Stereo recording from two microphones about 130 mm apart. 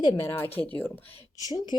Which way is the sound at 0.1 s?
15° left (ahead or behind).